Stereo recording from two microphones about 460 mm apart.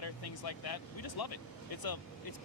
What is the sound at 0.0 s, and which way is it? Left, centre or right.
Speech, left.